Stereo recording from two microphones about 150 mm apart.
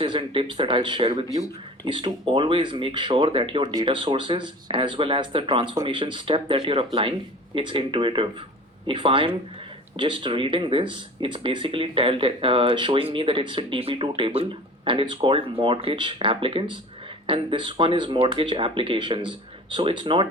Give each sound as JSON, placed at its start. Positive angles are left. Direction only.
{"t": 0.0, "sound": "speech", "side_deg": -35}